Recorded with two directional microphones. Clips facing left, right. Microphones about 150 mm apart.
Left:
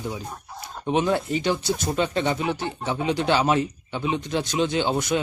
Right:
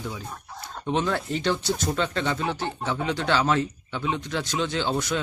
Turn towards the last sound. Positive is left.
turn(degrees=15)  # may be behind; listen again after turning